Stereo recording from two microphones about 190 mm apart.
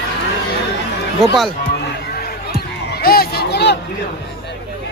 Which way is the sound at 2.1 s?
55° left (ahead or behind).